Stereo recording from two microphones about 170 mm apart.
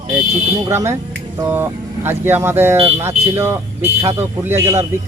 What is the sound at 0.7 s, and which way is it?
Speech, 15° right (ahead or behind).